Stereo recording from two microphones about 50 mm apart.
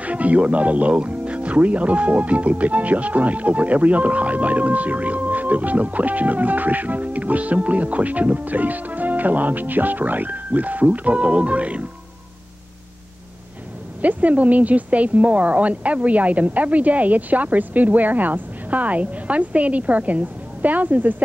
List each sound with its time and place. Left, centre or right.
0.0 s speech: right
14.0 s speech: right